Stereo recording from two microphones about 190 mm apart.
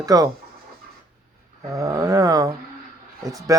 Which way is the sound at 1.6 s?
15° right (ahead or behind).